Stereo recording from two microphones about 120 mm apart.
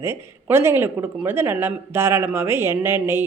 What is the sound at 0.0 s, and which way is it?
A woman's voice, 20° right (ahead or behind).